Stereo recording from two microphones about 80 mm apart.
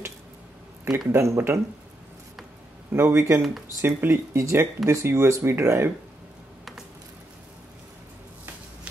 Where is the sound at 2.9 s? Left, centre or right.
Right.